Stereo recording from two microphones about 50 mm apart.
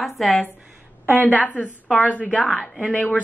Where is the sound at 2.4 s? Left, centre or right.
Centre.